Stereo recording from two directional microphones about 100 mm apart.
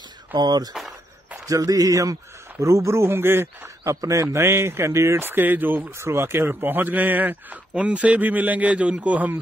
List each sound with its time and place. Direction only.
0.4 s a man's voice: 45° right (ahead or behind); by 9.4 s 15° right (ahead or behind)